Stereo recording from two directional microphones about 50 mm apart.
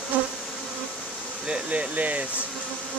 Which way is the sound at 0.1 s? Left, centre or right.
Right.